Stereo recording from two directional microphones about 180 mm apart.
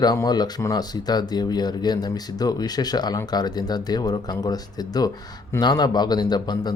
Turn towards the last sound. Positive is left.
turn(degrees=25)  # may be behind; listen again after turning